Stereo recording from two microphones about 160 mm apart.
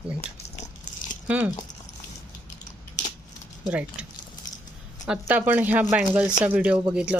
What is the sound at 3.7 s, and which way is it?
Speech, 10° right (ahead or behind).